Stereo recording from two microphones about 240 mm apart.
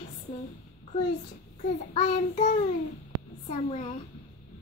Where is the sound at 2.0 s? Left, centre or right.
Left.